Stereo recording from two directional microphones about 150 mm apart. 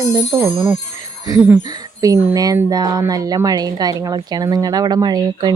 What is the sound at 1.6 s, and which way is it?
Speech, 25° right (ahead or behind).